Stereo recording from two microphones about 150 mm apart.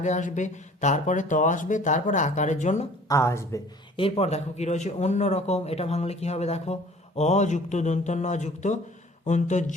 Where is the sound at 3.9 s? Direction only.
40° left (ahead or behind).